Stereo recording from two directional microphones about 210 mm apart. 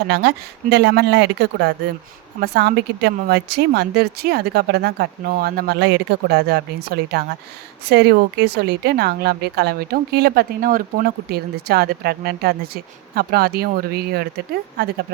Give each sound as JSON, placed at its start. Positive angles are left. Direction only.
{"t": 0.1, "sound": "a woman's voice", "side_deg": -55}